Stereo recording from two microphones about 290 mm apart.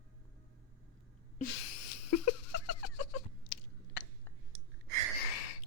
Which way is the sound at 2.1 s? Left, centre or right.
Left.